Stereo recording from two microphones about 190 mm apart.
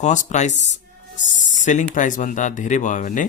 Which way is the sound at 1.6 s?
40° left (ahead or behind).